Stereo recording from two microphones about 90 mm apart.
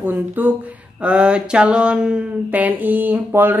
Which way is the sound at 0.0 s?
20° right (ahead or behind).